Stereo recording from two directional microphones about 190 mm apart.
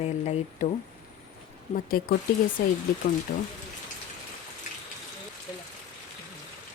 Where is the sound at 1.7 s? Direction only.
50° left (ahead or behind).